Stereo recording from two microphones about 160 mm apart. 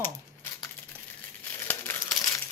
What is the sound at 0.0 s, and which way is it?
Crumpling, 15° left (ahead or behind).